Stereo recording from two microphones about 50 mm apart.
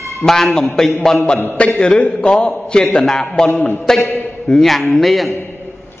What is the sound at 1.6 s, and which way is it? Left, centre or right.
A man's voice, left.